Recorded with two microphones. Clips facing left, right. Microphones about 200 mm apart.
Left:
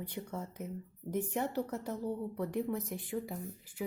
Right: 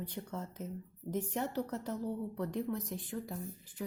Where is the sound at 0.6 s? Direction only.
60° left (ahead or behind).